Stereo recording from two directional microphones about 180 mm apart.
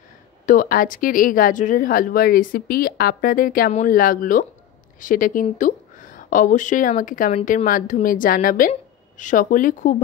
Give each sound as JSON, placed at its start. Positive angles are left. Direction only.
{"t": 0.5, "sound": "speech", "side_deg": 50}